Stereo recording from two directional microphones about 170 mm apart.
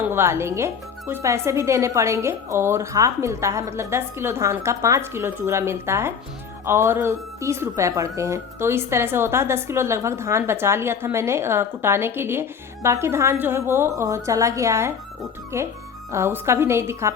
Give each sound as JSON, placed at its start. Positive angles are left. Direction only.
{"t": 0.0, "sound": "speech", "side_deg": -15}